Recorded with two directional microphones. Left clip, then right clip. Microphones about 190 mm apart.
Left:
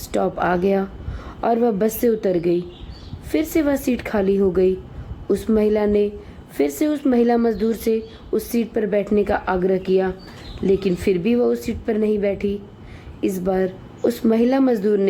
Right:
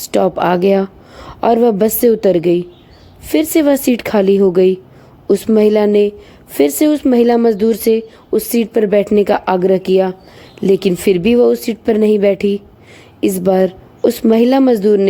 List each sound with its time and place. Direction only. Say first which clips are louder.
0.0 s a woman's voice: right 7 dB; 40° right (ahead or behind)